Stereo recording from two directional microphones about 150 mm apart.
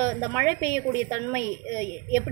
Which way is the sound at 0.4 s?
20° left (ahead or behind).